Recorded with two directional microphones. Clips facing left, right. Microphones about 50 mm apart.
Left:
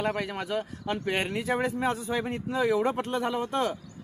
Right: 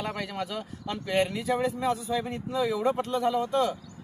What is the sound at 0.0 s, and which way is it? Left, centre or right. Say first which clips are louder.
Speech: left 3 dB; left.